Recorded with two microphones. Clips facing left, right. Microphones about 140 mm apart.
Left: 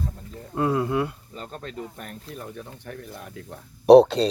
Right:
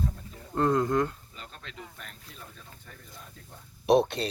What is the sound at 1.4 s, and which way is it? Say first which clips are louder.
Speech: left 11 dB; 40° left (ahead or behind).